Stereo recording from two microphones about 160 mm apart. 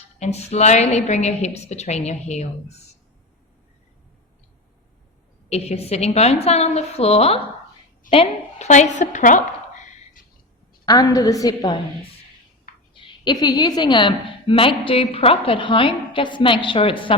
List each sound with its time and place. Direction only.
0.2 s a woman's voice: 40° left (ahead or behind)
5.5 s a woman's voice: 40° left (ahead or behind)
10.8 s a woman's voice: 20° left (ahead or behind)
12.9 s a woman's voice: 30° left (ahead or behind)